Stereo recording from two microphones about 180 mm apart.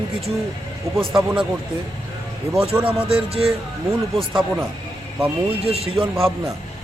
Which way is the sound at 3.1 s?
35° right (ahead or behind).